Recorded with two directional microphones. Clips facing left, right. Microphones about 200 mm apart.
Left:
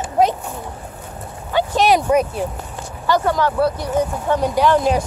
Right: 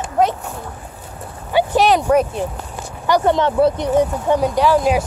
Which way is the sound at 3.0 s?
20° right (ahead or behind).